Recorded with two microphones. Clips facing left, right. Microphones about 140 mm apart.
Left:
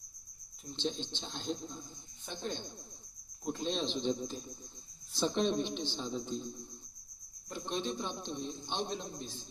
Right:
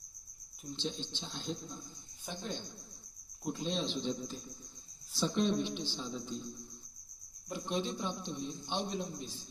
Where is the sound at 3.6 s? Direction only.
20° left (ahead or behind).